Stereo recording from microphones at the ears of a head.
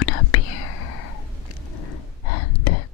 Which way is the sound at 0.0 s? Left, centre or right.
Left.